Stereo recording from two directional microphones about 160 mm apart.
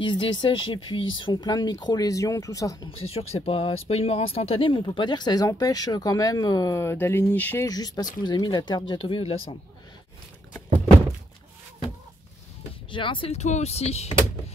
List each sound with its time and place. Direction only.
0.0 s speech: 30° left (ahead or behind)
3.2 s speech: 35° left (ahead or behind); by 7.6 s 10° left (ahead or behind)
7.6 s speech: 25° left (ahead or behind)
12.9 s speech: 30° left (ahead or behind)